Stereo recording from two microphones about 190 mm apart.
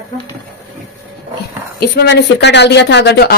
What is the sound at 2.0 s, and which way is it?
Speech, 65° left (ahead or behind).